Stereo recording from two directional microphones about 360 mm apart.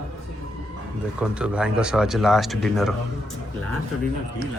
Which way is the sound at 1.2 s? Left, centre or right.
Centre.